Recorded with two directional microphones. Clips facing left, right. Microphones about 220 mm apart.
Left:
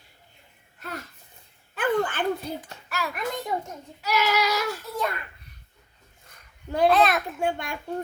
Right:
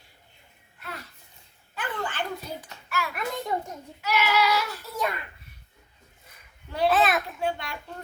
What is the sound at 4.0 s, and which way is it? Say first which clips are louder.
Child singing: even; 40° left (ahead or behind).